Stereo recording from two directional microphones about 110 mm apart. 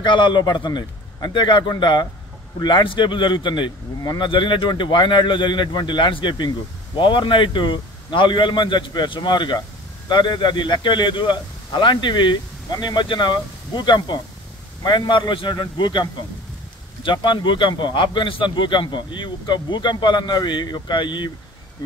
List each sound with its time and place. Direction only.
0.0 s a man's voice: 45° left (ahead or behind)